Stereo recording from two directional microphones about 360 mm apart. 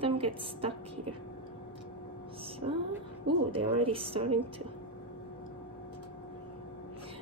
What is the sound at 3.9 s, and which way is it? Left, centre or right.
Speech, centre.